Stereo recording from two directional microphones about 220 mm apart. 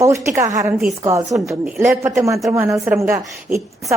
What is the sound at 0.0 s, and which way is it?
A woman's voice, 10° right (ahead or behind).